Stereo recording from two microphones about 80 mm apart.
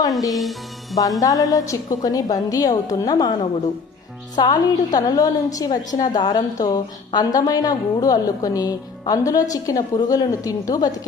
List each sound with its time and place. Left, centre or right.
0.3 s speech: centre
1.2 s a woman's voice: left
4.4 s a woman's voice: left
7.3 s a woman's voice: left